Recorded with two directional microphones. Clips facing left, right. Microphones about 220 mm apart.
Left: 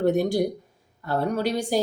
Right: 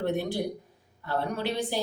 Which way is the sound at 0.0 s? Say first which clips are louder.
Left 7 dB; 45° left (ahead or behind).